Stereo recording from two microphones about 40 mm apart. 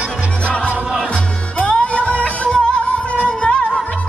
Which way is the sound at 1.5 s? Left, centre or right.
Left.